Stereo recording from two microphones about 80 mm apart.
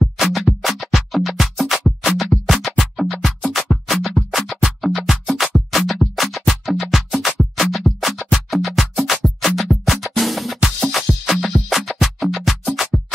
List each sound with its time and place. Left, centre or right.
0.2 s music: centre